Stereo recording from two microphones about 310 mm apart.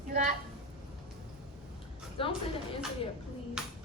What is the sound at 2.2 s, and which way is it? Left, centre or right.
Speech, centre.